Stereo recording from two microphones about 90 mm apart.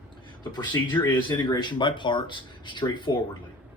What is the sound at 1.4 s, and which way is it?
Speech, 55° left (ahead or behind).